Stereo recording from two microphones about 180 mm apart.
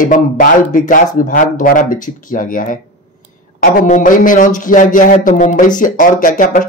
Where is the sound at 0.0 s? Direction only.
45° left (ahead or behind).